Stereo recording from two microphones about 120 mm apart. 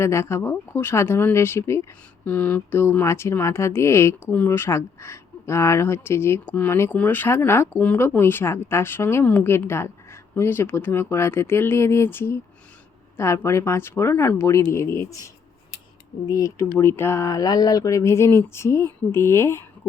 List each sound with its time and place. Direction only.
0.0 s speech: 25° left (ahead or behind)
16.2 s speech: 30° left (ahead or behind)